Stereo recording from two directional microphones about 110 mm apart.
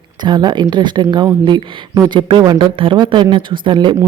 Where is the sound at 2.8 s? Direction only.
50° right (ahead or behind).